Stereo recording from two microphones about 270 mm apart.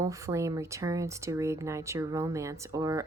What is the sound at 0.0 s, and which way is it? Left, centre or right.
A woman's voice, centre.